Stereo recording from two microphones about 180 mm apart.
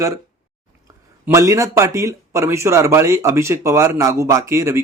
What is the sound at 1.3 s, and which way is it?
A man's voice, 15° right (ahead or behind).